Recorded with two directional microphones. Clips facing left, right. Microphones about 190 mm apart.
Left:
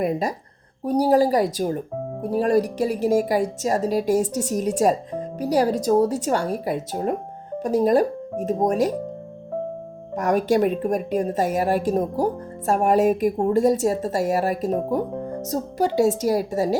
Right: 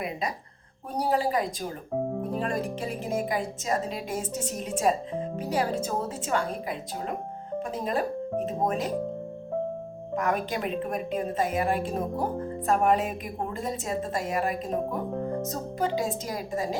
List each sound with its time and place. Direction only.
0.0 s a woman's voice: 45° left (ahead or behind)
10.2 s a woman's voice: 40° left (ahead or behind)